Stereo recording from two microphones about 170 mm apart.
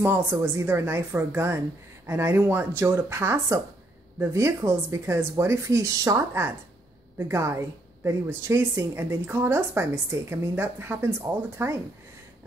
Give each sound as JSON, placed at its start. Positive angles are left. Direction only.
{"t": 0.0, "sound": "a woman's voice", "side_deg": -15}